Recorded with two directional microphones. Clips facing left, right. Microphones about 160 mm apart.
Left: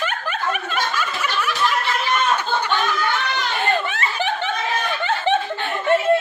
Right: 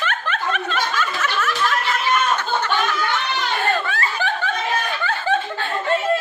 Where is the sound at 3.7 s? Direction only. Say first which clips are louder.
Even; 20° left (ahead or behind).